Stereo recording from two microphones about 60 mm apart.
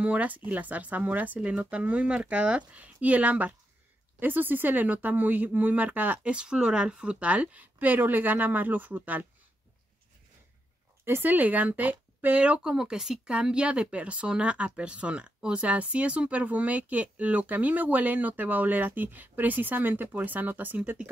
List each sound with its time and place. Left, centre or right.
0.0 s speech: right
6.3 s speech: centre; by 9.3 s right
11.1 s speech: right